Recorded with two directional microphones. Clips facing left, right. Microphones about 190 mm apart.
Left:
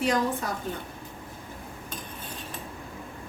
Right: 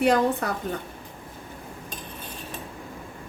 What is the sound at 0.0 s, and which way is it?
Speech, 65° right (ahead or behind).